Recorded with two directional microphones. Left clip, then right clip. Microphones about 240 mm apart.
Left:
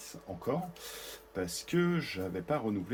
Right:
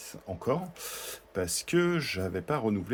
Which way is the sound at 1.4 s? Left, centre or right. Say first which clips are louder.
Right 5 dB; right.